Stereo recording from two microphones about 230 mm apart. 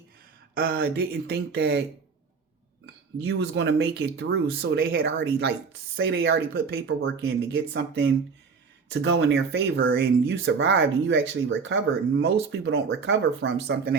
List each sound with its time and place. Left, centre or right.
0.5 s speech: right
3.2 s speech: right